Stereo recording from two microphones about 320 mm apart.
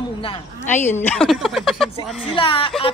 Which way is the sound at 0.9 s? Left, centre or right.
Centre.